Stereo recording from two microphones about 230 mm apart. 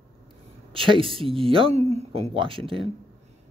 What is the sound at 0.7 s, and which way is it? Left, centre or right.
Speech, right.